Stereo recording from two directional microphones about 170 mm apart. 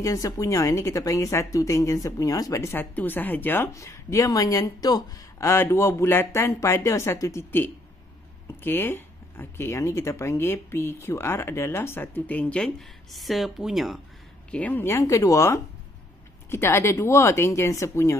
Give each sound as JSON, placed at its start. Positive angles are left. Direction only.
{"t": 0.0, "sound": "a woman's voice", "side_deg": 20}
{"t": 14.5, "sound": "a woman's voice", "side_deg": 10}